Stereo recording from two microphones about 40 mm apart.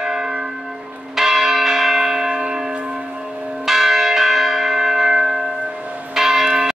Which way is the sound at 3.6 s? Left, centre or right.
Centre.